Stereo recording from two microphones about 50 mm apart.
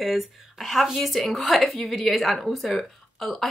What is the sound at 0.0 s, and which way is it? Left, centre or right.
Speech, centre.